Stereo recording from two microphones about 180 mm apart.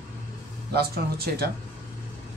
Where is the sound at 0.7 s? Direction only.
60° right (ahead or behind).